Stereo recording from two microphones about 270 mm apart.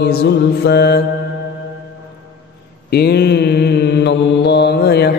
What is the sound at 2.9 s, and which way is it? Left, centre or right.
Mantra, left.